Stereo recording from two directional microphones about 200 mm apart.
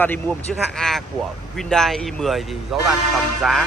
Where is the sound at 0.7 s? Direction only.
Centre (ahead or behind).